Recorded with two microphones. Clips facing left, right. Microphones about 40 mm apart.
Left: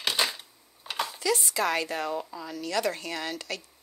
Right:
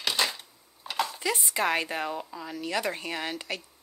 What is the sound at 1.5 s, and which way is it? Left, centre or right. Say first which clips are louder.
A woman's voice: even; right.